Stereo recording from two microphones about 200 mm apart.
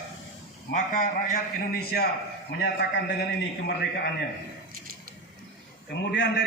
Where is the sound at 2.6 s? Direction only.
55° left (ahead or behind).